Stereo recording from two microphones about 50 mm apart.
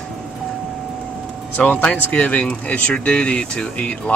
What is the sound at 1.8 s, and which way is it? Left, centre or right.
Speech, centre.